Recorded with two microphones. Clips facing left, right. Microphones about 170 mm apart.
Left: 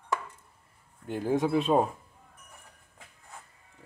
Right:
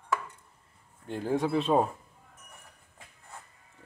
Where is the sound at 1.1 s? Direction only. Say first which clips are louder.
Left 2 dB; 5° left (ahead or behind).